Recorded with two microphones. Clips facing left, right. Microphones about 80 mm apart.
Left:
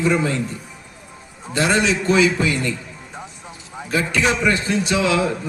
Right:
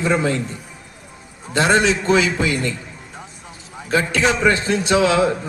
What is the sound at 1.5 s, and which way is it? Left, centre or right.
Speech, right.